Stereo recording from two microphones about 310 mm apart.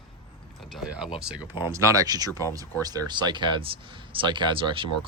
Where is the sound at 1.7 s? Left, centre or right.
Centre.